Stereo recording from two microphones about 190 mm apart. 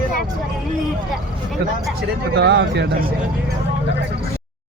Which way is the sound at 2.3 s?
60° right (ahead or behind).